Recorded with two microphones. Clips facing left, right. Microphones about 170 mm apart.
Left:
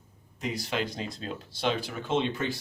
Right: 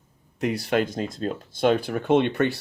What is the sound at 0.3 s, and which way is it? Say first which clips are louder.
Speech: right 8 dB; 60° right (ahead or behind).